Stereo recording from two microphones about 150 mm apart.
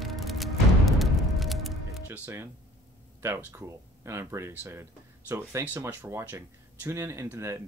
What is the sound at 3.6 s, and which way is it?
Speech, 15° right (ahead or behind).